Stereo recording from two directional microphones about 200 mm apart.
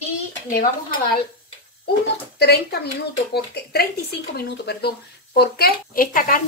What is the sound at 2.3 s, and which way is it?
Speech, 55° left (ahead or behind).